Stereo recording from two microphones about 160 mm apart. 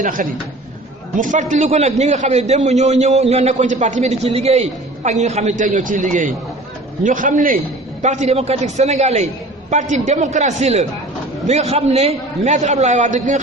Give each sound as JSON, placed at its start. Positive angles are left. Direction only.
{"t": 0.0, "sound": "a man's voice", "side_deg": -60}
{"t": 8.0, "sound": "a man's voice", "side_deg": -45}